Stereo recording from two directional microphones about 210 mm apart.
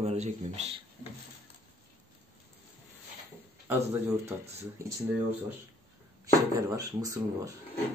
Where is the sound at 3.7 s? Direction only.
10° right (ahead or behind).